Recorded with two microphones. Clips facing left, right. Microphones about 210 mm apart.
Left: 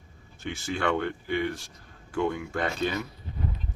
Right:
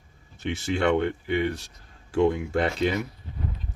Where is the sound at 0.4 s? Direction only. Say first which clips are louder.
Right 5 dB; 25° right (ahead or behind).